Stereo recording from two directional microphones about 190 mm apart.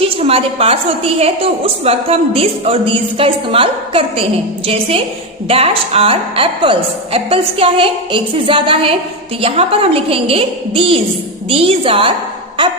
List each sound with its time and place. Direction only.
0.2 s a woman's voice: 30° right (ahead or behind)